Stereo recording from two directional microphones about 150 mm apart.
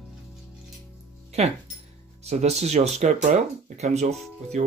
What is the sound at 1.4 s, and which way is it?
Speech, 45° right (ahead or behind).